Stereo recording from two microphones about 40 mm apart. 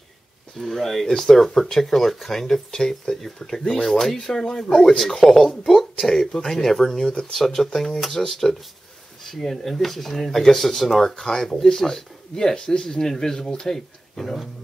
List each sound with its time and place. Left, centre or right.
0.6 s speech: centre